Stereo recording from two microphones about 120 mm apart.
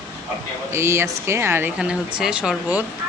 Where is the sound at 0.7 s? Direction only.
20° right (ahead or behind).